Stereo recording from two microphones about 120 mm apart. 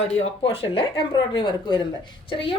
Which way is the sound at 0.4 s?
55° left (ahead or behind).